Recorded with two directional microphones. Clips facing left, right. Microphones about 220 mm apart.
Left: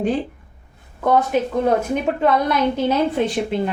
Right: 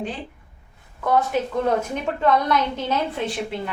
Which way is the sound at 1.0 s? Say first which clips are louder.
Left 4 dB; 20° left (ahead or behind).